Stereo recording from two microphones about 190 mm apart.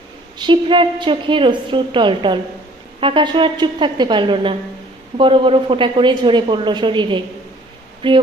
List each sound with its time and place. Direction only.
0.3 s a woman's voice: 25° right (ahead or behind)